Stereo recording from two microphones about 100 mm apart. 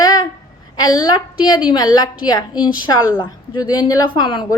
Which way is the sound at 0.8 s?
40° left (ahead or behind).